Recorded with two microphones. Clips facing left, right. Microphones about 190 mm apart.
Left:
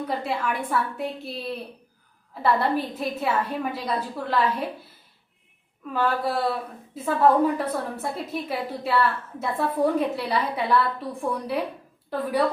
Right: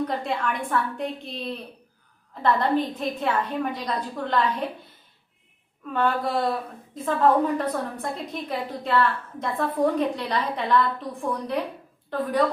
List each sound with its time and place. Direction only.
0.1 s a woman's voice: 5° left (ahead or behind)
5.9 s a woman's voice: 5° left (ahead or behind)